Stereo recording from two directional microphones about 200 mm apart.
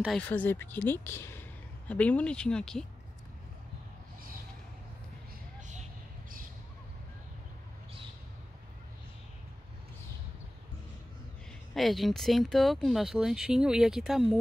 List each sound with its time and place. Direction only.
0.2 s speech: 10° left (ahead or behind)
5.6 s vehicle: 35° right (ahead or behind)
11.7 s speech: centre (ahead or behind)